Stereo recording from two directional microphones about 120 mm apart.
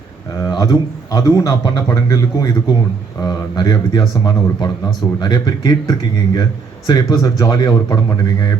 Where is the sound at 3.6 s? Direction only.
35° left (ahead or behind).